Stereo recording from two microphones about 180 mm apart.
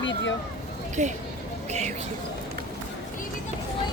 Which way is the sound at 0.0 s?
90° left.